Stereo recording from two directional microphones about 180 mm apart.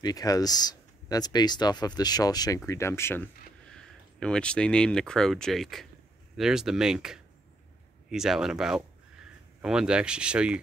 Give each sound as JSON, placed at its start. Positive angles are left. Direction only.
{"t": 0.0, "sound": "speech", "side_deg": 20}